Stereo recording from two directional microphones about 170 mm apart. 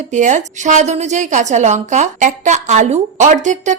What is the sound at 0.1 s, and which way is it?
A woman's voice, 45° right (ahead or behind).